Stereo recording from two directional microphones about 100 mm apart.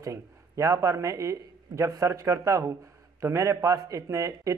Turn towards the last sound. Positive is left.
turn(degrees=-35)  # may be behind; listen again after turning